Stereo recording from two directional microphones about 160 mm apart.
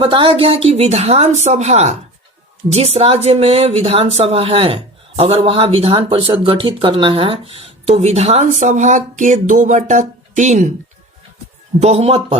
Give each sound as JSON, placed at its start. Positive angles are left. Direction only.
{"t": 0.0, "sound": "speech", "side_deg": -30}
{"t": 11.8, "sound": "speech", "side_deg": -40}